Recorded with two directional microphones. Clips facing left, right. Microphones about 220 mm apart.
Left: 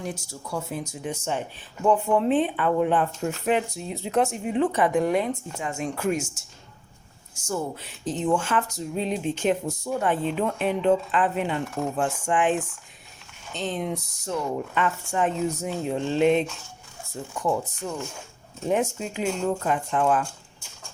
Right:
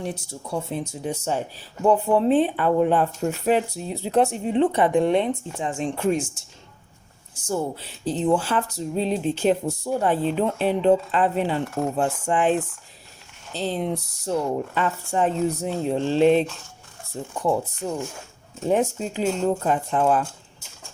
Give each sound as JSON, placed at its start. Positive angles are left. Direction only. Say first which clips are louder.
{"t": 0.0, "sound": "speech", "louder": "right 3 dB", "side_deg": -30}
{"t": 7.4, "sound": "speech", "louder": "right 3 dB", "side_deg": -30}
{"t": 17.4, "sound": "speech", "louder": "right 3 dB", "side_deg": -35}